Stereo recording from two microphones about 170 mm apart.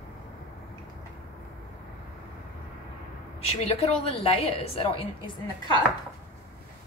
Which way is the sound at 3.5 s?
35° left (ahead or behind).